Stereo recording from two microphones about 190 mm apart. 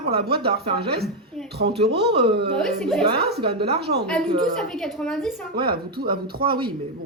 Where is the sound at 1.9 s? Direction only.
60° right (ahead or behind).